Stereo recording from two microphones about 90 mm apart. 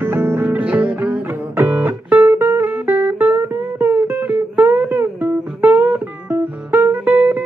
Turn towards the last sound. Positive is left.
turn(degrees=-15)  # may be behind; listen again after turning